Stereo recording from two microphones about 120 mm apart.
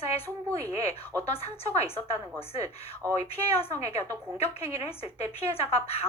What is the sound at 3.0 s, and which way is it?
Speech, 25° right (ahead or behind).